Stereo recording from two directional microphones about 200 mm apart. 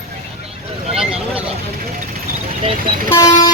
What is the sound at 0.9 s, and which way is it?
Vehicle, 5° right (ahead or behind).